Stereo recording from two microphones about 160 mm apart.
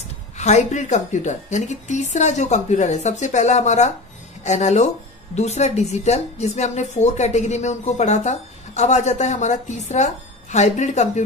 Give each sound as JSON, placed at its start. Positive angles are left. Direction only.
{"t": 0.4, "sound": "a woman's voice", "side_deg": 45}